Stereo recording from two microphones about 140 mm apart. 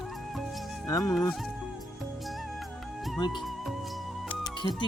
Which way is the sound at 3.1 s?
30° left (ahead or behind).